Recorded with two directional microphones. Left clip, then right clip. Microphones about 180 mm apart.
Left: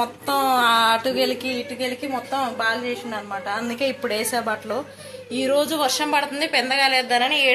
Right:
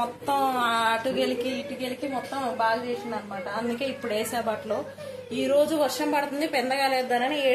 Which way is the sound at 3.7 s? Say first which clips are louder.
Left 5 dB; 40° left (ahead or behind).